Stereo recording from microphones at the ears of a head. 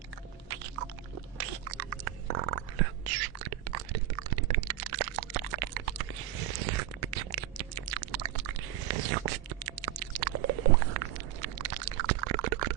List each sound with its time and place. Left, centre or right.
1.4 s whispering: right